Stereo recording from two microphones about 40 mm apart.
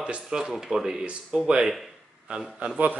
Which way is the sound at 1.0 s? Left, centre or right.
Right.